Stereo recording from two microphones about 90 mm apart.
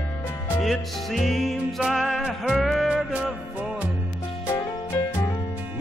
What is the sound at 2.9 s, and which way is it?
Music, 10° right (ahead or behind).